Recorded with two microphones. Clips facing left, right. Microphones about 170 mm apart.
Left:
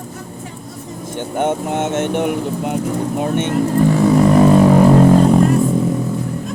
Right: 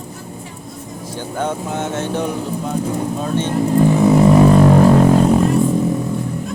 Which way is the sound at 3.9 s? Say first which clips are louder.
Right 1 dB; 20° right (ahead or behind).